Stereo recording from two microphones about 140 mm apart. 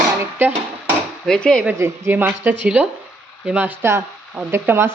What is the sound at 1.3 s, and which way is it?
Speech, 5° left (ahead or behind).